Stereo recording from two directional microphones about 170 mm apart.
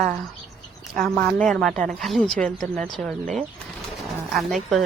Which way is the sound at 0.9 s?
5° left (ahead or behind).